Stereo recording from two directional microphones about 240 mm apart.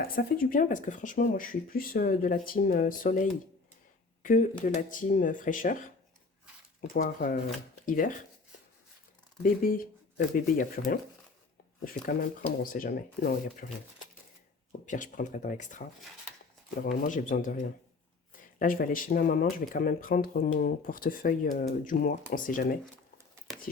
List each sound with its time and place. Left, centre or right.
0.2 s speech: left
6.9 s speech: left
9.4 s speech: left
14.8 s speech: left
16.8 s speech: left